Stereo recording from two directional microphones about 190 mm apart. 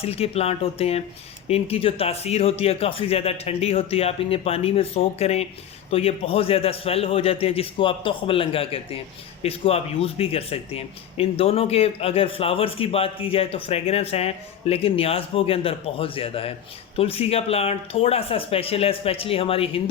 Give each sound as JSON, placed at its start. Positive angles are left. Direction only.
{"t": 0.0, "sound": "speech", "side_deg": 30}